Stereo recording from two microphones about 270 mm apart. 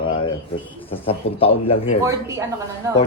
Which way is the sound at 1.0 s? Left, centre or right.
Left.